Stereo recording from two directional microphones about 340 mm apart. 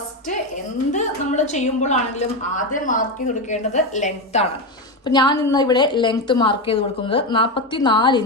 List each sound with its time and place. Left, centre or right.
0.9 s a woman's voice: left